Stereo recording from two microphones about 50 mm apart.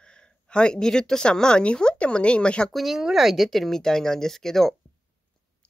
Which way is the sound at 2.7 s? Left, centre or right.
Centre.